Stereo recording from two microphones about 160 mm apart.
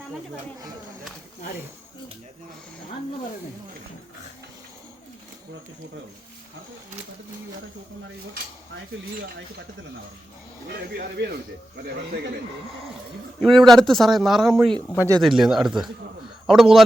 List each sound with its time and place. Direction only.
10.7 s speech: 75° right (ahead or behind)
13.4 s speech: centre (ahead or behind)
14.8 s speech: 10° left (ahead or behind)
15.2 s speech: centre (ahead or behind)